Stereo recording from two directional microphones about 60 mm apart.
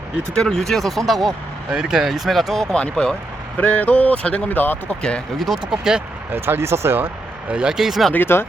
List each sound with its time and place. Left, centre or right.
0.3 s speech: centre
1.7 s speech: centre
3.6 s speech: left
5.4 s speech: centre
6.3 s speech: right
7.5 s speech: centre
8.1 s speech: left